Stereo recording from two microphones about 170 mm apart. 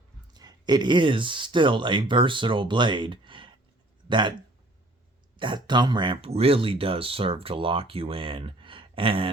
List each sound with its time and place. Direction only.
0.3 s speech: 25° right (ahead or behind)
5.4 s speech: 25° right (ahead or behind)